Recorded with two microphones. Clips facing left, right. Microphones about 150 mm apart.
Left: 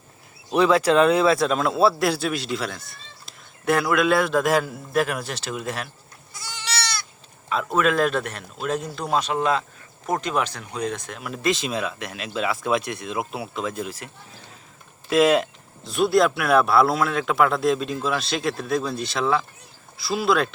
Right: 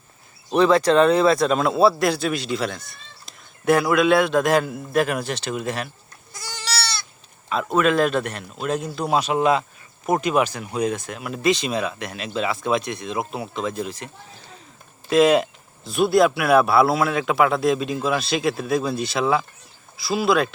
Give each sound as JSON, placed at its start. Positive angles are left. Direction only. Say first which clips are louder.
{"t": 0.5, "sound": "speech", "louder": "right 2 dB", "side_deg": 5}
{"t": 6.3, "sound": "goat", "louder": "right 2 dB", "side_deg": -40}
{"t": 7.5, "sound": "speech", "louder": "right 2 dB", "side_deg": 0}
{"t": 15.1, "sound": "speech", "louder": "right 2 dB", "side_deg": 0}